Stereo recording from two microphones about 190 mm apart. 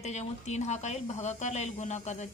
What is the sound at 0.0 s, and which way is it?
A woman's voice, 35° left (ahead or behind).